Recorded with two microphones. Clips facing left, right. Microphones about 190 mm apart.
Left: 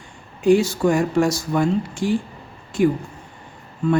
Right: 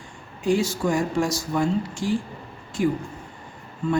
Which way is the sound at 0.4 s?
60° left (ahead or behind).